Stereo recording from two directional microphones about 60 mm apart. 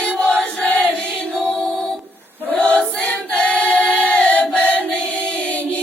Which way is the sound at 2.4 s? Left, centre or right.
Left.